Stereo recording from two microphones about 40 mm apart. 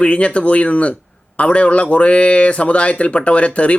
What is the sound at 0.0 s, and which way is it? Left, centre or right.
A man's voice, left.